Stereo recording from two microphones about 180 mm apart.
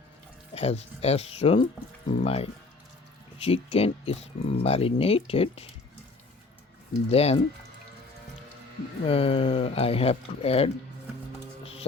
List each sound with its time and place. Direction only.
0.5 s speech: 35° left (ahead or behind)
7.1 s speech: 35° left (ahead or behind)
9.0 s speech: 30° left (ahead or behind)
11.6 s music: 35° left (ahead or behind)